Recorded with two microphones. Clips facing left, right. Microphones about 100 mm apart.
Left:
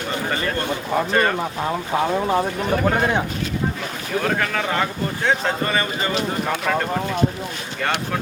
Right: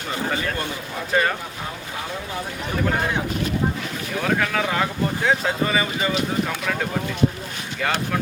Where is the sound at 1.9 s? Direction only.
55° left (ahead or behind).